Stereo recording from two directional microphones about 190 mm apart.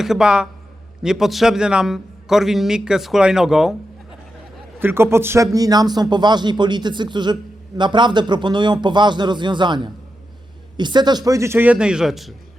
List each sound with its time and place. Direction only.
0.0 s a man's voice: 5° right (ahead or behind)
4.8 s a man's voice: 10° right (ahead or behind)